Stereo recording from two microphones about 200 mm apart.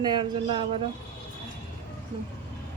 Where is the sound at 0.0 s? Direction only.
25° right (ahead or behind).